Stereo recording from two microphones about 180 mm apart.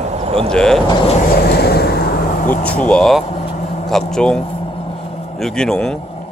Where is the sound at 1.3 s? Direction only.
60° left (ahead or behind).